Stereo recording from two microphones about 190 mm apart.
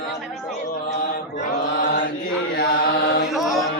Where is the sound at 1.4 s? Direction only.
45° left (ahead or behind).